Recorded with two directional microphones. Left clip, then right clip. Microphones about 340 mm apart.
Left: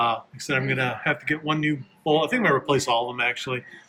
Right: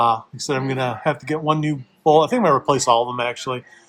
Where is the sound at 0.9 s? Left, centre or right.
Centre.